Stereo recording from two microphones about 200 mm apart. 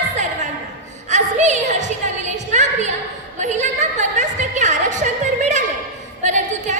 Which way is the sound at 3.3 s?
35° right (ahead or behind).